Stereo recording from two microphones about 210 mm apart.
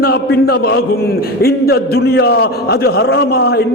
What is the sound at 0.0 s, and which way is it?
A man's voice, 45° left (ahead or behind).